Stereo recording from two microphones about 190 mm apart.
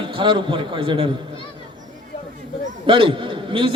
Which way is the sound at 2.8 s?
25° right (ahead or behind).